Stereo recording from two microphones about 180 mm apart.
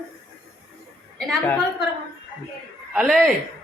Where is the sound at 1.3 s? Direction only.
Centre (ahead or behind).